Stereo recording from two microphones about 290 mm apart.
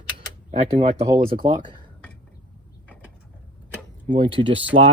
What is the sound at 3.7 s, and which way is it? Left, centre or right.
Tick-tock, centre.